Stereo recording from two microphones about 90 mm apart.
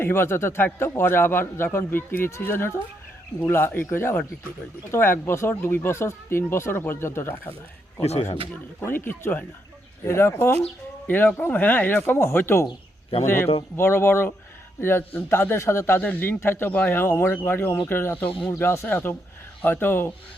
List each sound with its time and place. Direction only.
0.0 s a man's voice: 25° left (ahead or behind)
8.8 s a man's voice: 25° left (ahead or behind)